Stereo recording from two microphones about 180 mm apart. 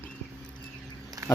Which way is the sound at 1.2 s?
15° right (ahead or behind).